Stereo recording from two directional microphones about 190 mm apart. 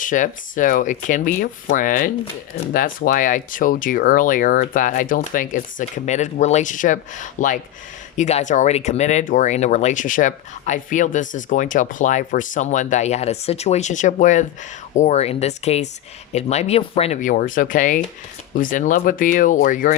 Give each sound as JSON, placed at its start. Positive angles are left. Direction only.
{"t": 0.0, "sound": "speech", "side_deg": 45}